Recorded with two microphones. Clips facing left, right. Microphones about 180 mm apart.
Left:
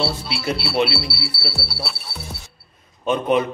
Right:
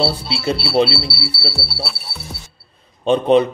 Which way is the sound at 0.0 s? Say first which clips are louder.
Right 4 dB; 30° right (ahead or behind).